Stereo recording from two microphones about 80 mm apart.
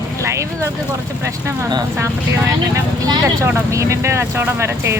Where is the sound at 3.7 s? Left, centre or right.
Right.